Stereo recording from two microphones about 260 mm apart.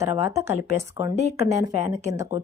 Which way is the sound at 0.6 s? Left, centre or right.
Left.